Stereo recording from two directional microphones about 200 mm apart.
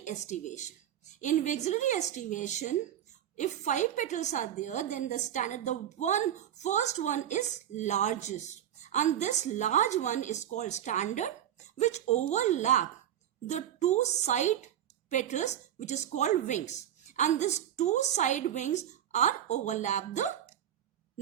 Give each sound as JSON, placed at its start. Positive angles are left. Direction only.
{"t": 0.0, "sound": "a woman's voice", "side_deg": 35}